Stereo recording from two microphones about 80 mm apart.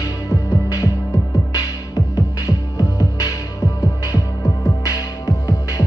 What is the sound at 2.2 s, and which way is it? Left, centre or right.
Music, left.